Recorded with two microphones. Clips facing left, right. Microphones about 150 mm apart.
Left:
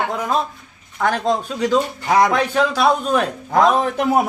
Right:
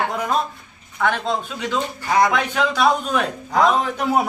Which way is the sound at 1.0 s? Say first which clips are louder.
Left 3 dB; 40° left (ahead or behind).